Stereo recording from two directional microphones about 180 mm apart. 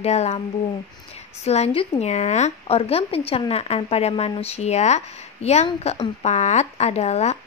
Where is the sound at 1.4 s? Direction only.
35° left (ahead or behind).